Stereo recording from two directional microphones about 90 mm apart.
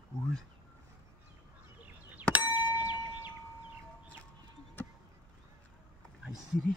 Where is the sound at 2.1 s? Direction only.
20° right (ahead or behind).